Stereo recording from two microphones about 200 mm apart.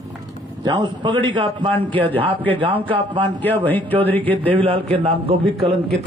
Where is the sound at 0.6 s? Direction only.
20° right (ahead or behind).